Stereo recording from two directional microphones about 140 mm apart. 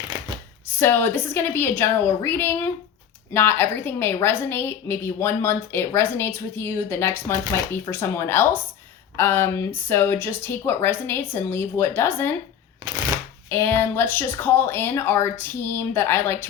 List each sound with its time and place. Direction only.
0.8 s a woman's voice: 15° left (ahead or behind)
13.5 s a woman's voice: 15° left (ahead or behind)